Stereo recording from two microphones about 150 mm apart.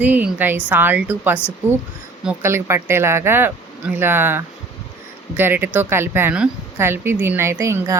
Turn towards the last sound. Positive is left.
turn(degrees=-20)  # may be behind; listen again after turning